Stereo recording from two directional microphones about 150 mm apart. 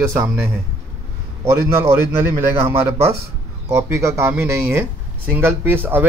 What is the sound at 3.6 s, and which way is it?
Speech, 20° right (ahead or behind).